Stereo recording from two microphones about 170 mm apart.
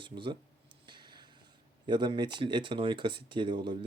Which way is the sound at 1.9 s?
25° right (ahead or behind).